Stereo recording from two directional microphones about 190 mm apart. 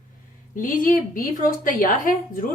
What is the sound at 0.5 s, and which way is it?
A woman's voice, 45° left (ahead or behind).